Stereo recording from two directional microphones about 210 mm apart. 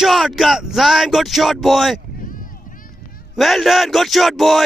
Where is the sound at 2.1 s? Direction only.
40° left (ahead or behind).